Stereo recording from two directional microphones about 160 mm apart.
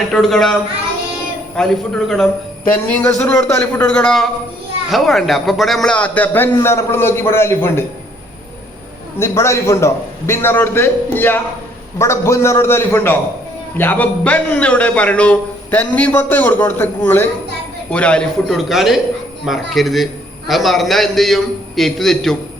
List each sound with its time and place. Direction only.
0.1 s a man's voice: 5° left (ahead or behind)
1.5 s a man's voice: centre (ahead or behind)
9.1 s a man's voice: 15° left (ahead or behind)